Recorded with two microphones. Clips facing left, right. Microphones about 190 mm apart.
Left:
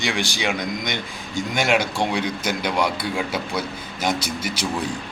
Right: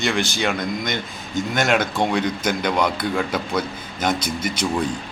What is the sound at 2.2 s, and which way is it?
Speech, 50° right (ahead or behind).